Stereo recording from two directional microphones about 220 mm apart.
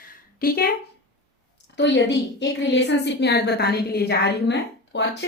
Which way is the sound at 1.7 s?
55° left (ahead or behind).